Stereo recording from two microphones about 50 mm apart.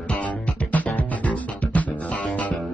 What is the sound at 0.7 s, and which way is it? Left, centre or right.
Music, left.